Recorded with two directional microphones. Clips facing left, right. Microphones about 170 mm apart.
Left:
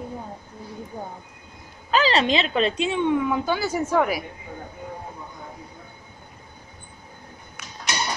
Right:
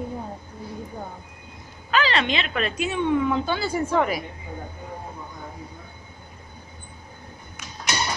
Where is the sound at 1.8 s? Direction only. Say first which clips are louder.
Left 3 dB; 35° left (ahead or behind).